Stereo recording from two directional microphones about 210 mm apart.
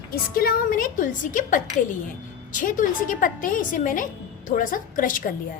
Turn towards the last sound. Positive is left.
turn(degrees=40)  # may be behind; listen again after turning